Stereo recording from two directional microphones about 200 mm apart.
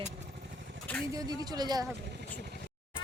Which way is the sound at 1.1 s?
20° right (ahead or behind).